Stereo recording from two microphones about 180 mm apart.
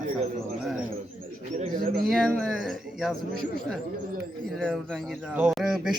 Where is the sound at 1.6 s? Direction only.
45° right (ahead or behind).